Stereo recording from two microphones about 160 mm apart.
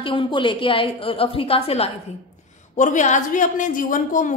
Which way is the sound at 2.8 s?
50° left (ahead or behind).